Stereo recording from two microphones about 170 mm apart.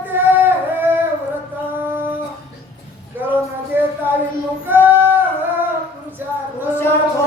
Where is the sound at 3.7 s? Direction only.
10° right (ahead or behind).